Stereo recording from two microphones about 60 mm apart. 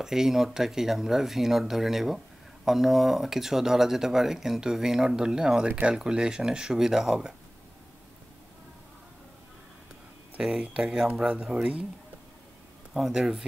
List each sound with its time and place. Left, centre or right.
0.0 s speech: centre
10.6 s speech: centre
12.9 s speech: centre